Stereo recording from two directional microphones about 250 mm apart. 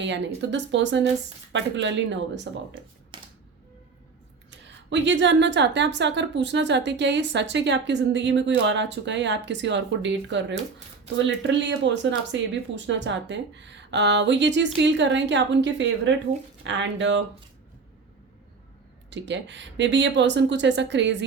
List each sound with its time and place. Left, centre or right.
0.0 s a woman's voice: right
3.1 s a sound: centre
4.5 s a woman's voice: right
19.1 s a woman's voice: right